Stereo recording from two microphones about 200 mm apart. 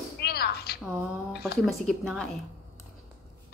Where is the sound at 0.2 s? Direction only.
50° left (ahead or behind).